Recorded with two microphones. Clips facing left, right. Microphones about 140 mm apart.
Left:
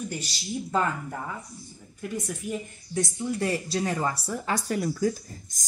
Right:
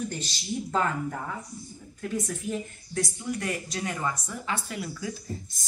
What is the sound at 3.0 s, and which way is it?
Speech, 30° left (ahead or behind).